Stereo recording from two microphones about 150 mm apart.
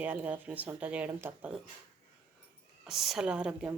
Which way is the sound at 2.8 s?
Centre (ahead or behind).